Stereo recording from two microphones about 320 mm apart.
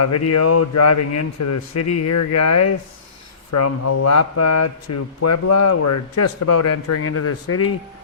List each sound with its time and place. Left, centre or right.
0.0 s speech: left